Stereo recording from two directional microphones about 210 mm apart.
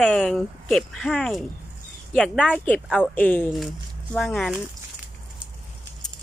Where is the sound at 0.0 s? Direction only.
Centre (ahead or behind).